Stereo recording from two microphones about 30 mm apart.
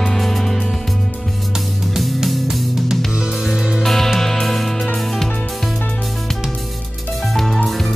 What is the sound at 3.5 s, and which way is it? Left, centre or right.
Music, centre.